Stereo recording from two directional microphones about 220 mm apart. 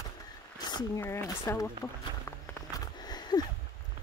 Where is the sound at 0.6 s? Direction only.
20° left (ahead or behind).